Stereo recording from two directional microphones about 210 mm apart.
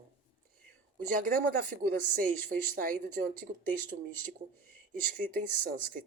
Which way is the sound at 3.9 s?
45° right (ahead or behind).